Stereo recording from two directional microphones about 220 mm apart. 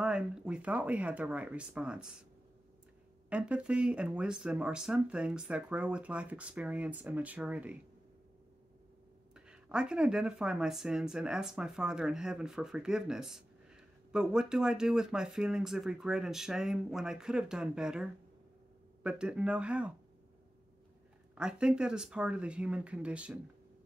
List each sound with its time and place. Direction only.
0.0 s speech: 5° right (ahead or behind)
3.3 s speech: 5° right (ahead or behind)
9.3 s speech: 5° right (ahead or behind)
21.4 s speech: 5° right (ahead or behind)